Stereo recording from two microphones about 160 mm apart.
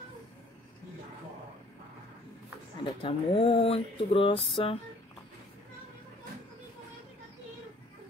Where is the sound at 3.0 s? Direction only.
35° left (ahead or behind).